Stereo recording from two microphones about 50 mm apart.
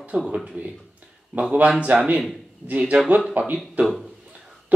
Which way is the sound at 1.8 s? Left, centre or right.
Right.